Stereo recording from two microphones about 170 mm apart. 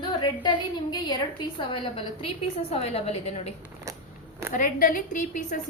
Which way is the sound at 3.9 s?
20° right (ahead or behind).